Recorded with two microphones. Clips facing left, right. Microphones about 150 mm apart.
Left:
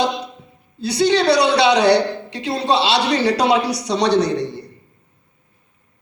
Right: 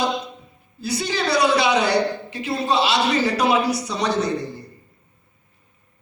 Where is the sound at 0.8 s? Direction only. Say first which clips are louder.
Left 8 dB; 75° left (ahead or behind).